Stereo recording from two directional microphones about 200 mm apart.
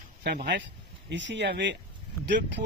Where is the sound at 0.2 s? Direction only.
55° right (ahead or behind).